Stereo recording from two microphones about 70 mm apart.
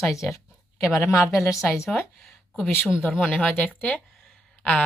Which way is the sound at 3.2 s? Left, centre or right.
Centre.